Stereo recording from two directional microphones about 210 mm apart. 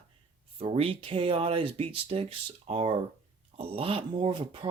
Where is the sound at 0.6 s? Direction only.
25° right (ahead or behind).